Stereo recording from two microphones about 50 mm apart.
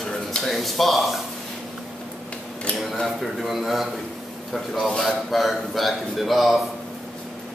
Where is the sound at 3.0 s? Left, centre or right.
Centre.